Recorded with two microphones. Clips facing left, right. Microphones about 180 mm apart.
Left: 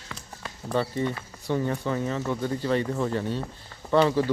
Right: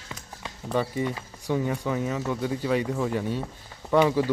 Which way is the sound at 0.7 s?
10° right (ahead or behind).